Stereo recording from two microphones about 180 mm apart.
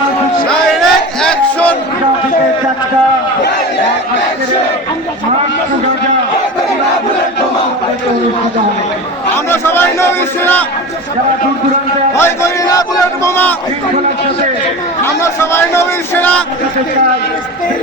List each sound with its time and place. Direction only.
0.4 s crowd: 5° left (ahead or behind)
9.5 s a man's voice: 10° left (ahead or behind)
12.1 s music: 15° left (ahead or behind)
13.2 s a man's voice: 10° left (ahead or behind)
15.0 s a man's voice: 15° left (ahead or behind)